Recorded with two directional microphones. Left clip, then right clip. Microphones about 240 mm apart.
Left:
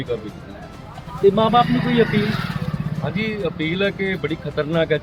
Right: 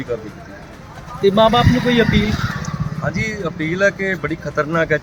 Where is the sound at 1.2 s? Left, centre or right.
Right.